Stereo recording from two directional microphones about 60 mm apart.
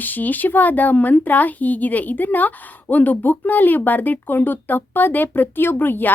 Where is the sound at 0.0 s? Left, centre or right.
Left.